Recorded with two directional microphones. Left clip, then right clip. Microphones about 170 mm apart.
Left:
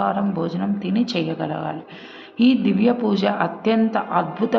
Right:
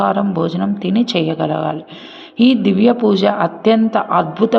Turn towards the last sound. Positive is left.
turn(degrees=-35)  # may be behind; listen again after turning